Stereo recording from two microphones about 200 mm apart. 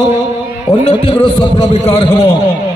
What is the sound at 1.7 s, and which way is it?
Speech, 30° left (ahead or behind).